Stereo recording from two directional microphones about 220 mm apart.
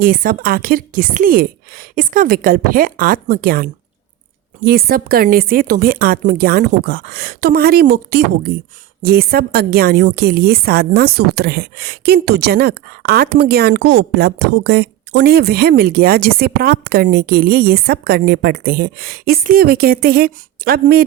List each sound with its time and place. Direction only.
0.0 s a woman's voice: 40° right (ahead or behind)